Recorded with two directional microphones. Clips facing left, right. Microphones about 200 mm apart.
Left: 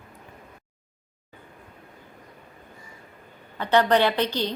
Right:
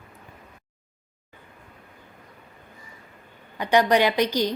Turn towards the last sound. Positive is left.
turn(degrees=-10)  # may be behind; listen again after turning